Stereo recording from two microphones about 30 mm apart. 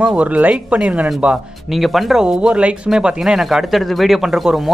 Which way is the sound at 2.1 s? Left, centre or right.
Centre.